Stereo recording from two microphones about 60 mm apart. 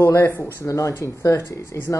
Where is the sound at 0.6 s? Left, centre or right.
Left.